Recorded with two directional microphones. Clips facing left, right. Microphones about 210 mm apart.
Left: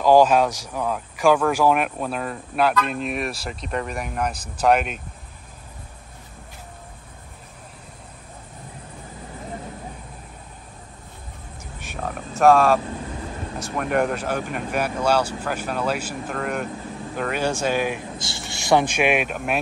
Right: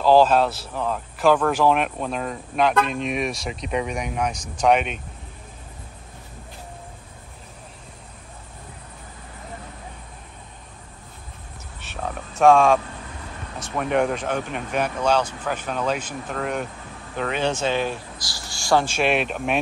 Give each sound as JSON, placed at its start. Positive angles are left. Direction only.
{"t": 0.0, "sound": "speech", "side_deg": 15}
{"t": 11.8, "sound": "a sound", "side_deg": 10}
{"t": 13.6, "sound": "speech", "side_deg": 5}
{"t": 18.1, "sound": "speech", "side_deg": 25}